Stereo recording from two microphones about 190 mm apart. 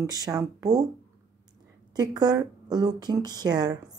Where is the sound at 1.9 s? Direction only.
20° right (ahead or behind).